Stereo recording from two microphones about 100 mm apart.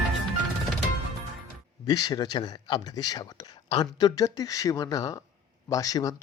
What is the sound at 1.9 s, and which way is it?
Speech, 40° left (ahead or behind).